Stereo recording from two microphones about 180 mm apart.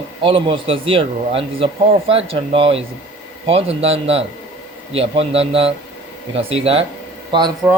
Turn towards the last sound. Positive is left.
turn(degrees=-25)  # may be behind; listen again after turning